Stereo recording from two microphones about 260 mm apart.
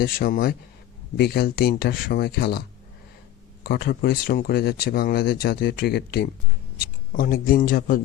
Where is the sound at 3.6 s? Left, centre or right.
Left.